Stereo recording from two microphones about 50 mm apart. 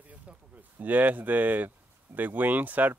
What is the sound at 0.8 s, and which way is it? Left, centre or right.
Speech, right.